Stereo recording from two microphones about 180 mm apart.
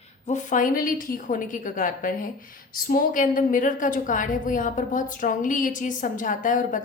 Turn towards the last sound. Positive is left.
turn(degrees=45)  # may be behind; listen again after turning